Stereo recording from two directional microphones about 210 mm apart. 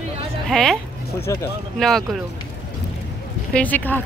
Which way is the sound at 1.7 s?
Centre (ahead or behind).